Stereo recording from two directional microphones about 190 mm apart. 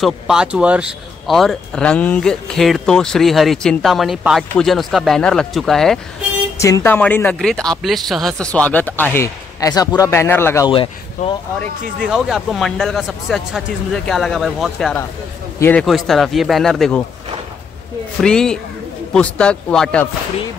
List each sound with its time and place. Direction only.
0.0 s a man's voice: 5° right (ahead or behind)
6.6 s speech: 15° left (ahead or behind)
10.7 s speech: 25° left (ahead or behind)
12.1 s a man's voice: 5° right (ahead or behind)
18.2 s a man's voice: 5° left (ahead or behind)